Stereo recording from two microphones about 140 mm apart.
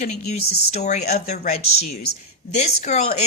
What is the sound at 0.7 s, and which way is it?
Speech, 55° left (ahead or behind).